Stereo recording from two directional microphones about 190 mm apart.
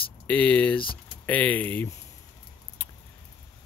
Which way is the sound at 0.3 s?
5° left (ahead or behind).